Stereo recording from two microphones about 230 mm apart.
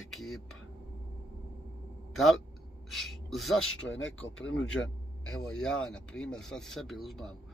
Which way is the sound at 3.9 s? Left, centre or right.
Left.